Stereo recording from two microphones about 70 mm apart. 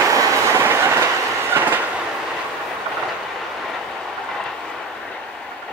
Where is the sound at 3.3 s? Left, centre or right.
Centre.